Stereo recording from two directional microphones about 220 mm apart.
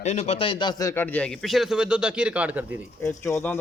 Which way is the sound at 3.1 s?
10° left (ahead or behind).